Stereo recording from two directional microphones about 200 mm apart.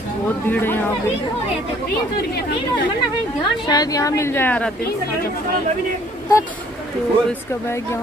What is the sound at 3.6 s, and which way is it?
A woman's voice, 20° left (ahead or behind).